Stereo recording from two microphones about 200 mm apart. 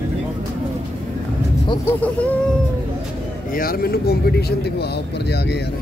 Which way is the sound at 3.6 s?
50° left (ahead or behind).